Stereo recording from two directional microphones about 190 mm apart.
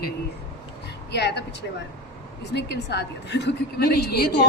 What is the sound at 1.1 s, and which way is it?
Speech, 65° left (ahead or behind).